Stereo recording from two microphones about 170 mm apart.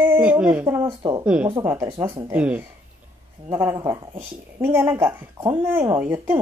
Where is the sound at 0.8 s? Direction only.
25° right (ahead or behind).